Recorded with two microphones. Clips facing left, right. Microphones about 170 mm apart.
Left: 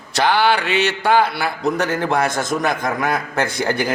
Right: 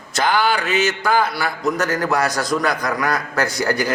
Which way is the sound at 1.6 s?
30° left (ahead or behind).